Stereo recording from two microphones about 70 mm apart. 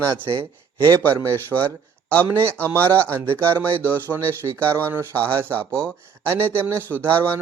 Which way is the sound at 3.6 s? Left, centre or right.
Right.